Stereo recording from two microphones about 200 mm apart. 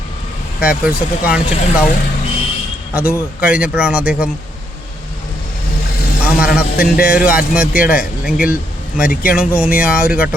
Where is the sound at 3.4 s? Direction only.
5° right (ahead or behind).